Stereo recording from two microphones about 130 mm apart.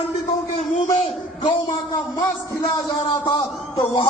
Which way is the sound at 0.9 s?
40° left (ahead or behind).